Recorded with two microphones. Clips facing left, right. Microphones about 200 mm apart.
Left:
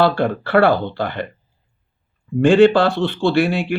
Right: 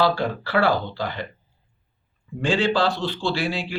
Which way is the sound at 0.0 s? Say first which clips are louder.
Left 5 dB; 55° left (ahead or behind).